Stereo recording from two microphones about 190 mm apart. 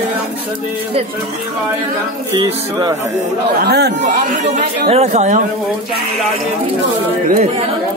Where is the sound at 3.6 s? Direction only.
60° right (ahead or behind).